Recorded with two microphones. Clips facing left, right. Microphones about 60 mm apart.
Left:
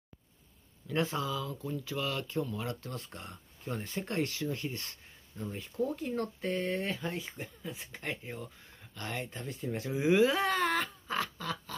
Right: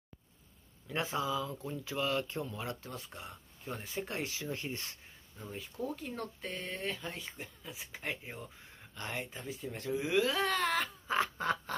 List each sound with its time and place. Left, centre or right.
0.8 s speech: centre
2.9 s speech: centre
5.4 s speech: centre
9.7 s speech: centre
11.3 s a sound: right